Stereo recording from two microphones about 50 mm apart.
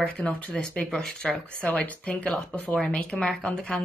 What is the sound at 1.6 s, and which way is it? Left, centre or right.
Speech, left.